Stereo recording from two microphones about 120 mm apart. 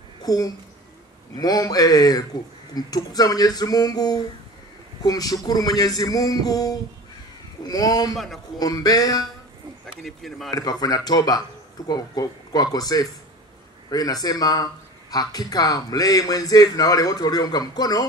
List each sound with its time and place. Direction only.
0.2 s a sound: 30° left (ahead or behind)
1.3 s speech: 30° left (ahead or behind)
10.0 s speech: centre (ahead or behind)
10.5 s speech: 30° left (ahead or behind)